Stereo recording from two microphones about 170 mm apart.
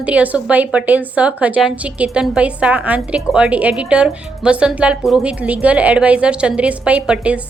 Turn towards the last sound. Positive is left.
turn(degrees=-10)  # may be behind; listen again after turning